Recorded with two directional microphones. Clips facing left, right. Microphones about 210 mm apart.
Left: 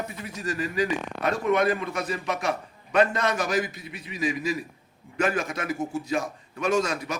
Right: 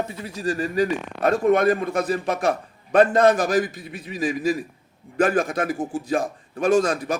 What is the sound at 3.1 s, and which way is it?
Speech, 35° right (ahead or behind).